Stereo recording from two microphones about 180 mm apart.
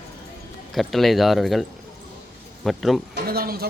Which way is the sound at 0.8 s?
Centre (ahead or behind).